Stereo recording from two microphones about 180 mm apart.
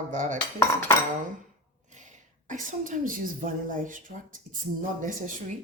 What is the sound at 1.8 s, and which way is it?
A woman's voice, 45° right (ahead or behind).